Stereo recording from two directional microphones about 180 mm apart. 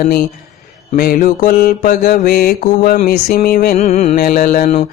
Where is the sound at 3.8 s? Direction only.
40° left (ahead or behind).